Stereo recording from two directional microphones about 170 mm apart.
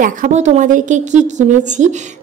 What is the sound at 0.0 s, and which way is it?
A woman's voice, 50° right (ahead or behind).